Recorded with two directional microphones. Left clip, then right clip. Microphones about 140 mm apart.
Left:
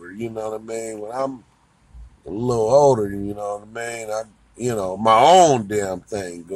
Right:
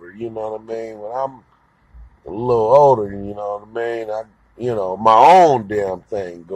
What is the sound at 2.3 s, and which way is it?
Speech, 10° left (ahead or behind).